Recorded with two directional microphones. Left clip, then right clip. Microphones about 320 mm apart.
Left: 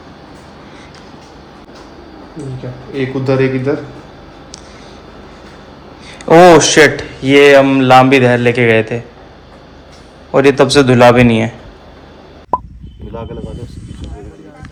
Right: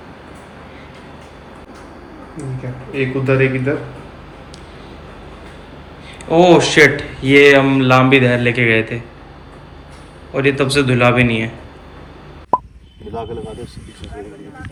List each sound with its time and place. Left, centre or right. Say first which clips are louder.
2.9 s a man's voice: left 2 dB; left
6.4 s a man's voice: left 3 dB; centre
10.3 s a man's voice: left 7 dB; centre
12.5 s plop: even; centre